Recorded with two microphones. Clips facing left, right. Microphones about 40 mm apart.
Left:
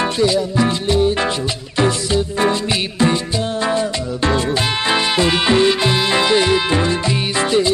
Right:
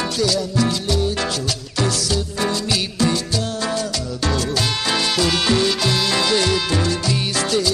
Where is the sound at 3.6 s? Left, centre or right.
Left.